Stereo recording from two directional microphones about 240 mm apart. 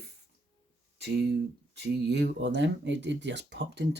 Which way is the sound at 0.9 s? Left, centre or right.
Right.